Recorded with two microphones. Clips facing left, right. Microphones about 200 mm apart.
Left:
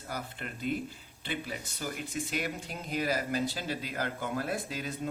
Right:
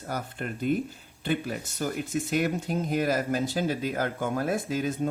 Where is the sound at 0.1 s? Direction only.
50° right (ahead or behind).